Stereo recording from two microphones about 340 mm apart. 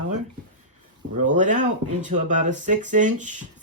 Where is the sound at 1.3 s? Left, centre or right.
Right.